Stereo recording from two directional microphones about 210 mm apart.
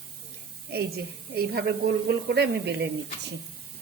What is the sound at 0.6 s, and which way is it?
A woman's voice, 50° right (ahead or behind).